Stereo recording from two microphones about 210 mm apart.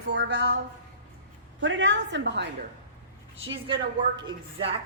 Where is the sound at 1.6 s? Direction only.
60° right (ahead or behind).